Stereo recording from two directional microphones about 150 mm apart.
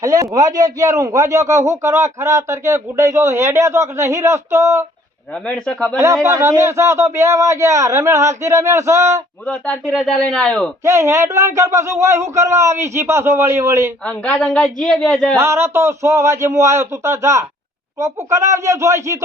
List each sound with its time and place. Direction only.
0.0 s speech: 25° right (ahead or behind)
5.5 s speech: 5° left (ahead or behind)
6.2 s speech: 20° right (ahead or behind)
9.5 s speech: 5° left (ahead or behind)
10.8 s speech: 15° right (ahead or behind)
14.0 s speech: 10° left (ahead or behind)
15.4 s speech: 20° right (ahead or behind)